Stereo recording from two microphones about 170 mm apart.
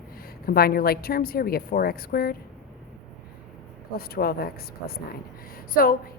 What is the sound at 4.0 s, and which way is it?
A woman's voice, 60° left (ahead or behind).